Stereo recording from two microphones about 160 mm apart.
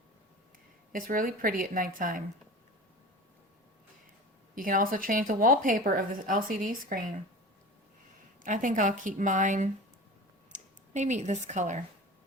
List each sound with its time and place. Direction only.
0.9 s speech: 60° right (ahead or behind)
4.5 s speech: 60° right (ahead or behind)
8.4 s speech: 55° right (ahead or behind)